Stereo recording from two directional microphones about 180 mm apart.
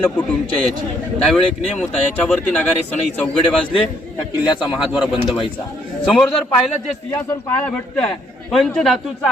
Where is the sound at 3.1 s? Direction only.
5° left (ahead or behind).